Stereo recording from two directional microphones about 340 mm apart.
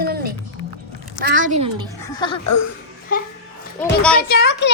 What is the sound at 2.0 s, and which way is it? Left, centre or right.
Speech, centre.